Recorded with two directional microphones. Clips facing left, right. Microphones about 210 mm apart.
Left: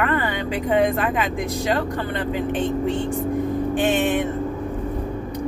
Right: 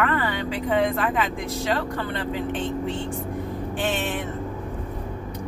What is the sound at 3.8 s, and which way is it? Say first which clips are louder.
Speech: left 6 dB; 15° left (ahead or behind).